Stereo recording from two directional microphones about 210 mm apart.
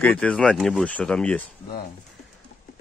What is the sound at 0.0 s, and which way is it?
Speech, 5° left (ahead or behind).